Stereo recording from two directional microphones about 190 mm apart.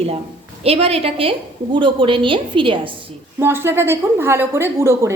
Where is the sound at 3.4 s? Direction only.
10° right (ahead or behind).